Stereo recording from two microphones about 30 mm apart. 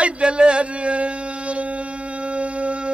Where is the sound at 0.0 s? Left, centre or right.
Right.